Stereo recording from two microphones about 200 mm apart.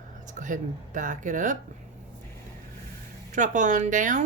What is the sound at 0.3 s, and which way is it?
Speech, 40° right (ahead or behind).